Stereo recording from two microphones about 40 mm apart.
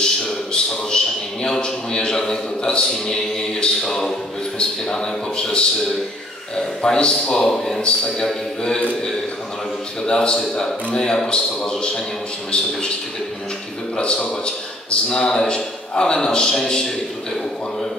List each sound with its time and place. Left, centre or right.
0.0 s a sound: centre
4.6 s a man's voice: centre
10.0 s a man's voice: centre
13.9 s a man's voice: left